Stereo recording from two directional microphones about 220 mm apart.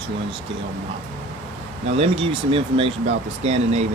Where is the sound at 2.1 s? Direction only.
25° right (ahead or behind).